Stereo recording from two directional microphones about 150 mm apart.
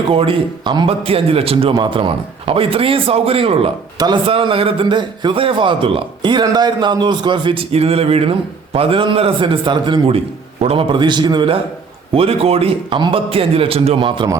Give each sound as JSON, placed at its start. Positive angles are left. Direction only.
{"t": 0.1, "sound": "a man's voice", "side_deg": -35}